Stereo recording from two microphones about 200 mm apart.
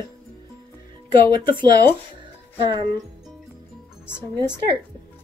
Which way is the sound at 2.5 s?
25° right (ahead or behind).